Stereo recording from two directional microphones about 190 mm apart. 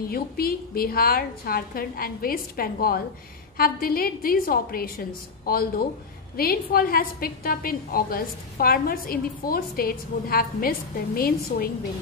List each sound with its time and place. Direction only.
0.1 s a woman's voice: 50° left (ahead or behind)